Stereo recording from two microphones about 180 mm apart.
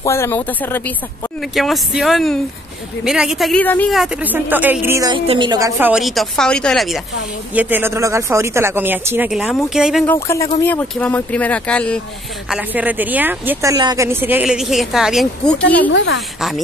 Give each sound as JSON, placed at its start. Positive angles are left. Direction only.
{"t": 0.0, "sound": "speech", "side_deg": 15}
{"t": 1.5, "sound": "speech", "side_deg": 0}
{"t": 3.9, "sound": "a woman's voice", "side_deg": -5}
{"t": 5.2, "sound": "a woman's voice", "side_deg": -30}
{"t": 5.8, "sound": "speech", "side_deg": -5}
{"t": 7.5, "sound": "a woman's voice", "side_deg": -10}
{"t": 10.0, "sound": "speech", "side_deg": 15}
{"t": 12.4, "sound": "a woman's voice", "side_deg": -5}
{"t": 15.9, "sound": "a woman's voice", "side_deg": 90}
{"t": 16.3, "sound": "speech", "side_deg": 0}